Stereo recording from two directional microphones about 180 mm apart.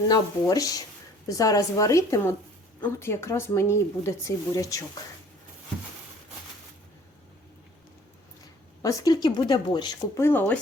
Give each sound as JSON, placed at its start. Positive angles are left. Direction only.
{"t": 0.1, "sound": "speech", "side_deg": 20}
{"t": 8.8, "sound": "speech", "side_deg": 20}